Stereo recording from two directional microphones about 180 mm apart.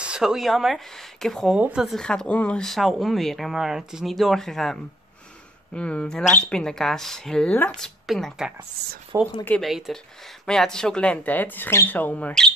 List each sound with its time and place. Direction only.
0.0 s speech: 5° right (ahead or behind)
5.8 s speech: 5° left (ahead or behind)
8.8 s speech: 65° right (ahead or behind)
9.4 s speech: 5° left (ahead or behind)